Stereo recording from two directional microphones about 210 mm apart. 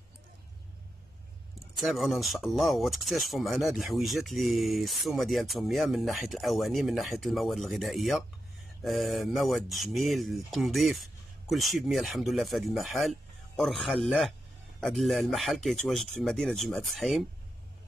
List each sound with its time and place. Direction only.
1.5 s speech: centre (ahead or behind)